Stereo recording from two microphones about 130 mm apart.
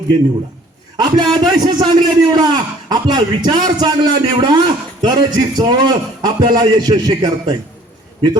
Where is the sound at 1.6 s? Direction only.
35° right (ahead or behind).